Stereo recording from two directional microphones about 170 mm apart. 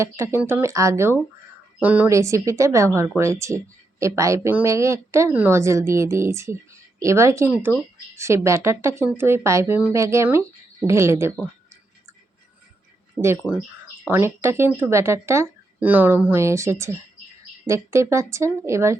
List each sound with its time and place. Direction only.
0.0 s a woman's voice: 15° right (ahead or behind)
13.2 s a woman's voice: 5° right (ahead or behind)